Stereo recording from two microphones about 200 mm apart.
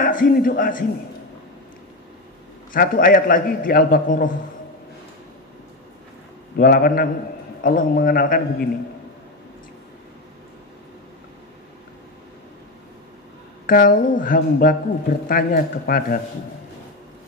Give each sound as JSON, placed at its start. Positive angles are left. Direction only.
{"t": 0.0, "sound": "speech", "side_deg": 45}
{"t": 2.7, "sound": "speech", "side_deg": 45}
{"t": 6.6, "sound": "speech", "side_deg": 45}
{"t": 13.7, "sound": "speech", "side_deg": 45}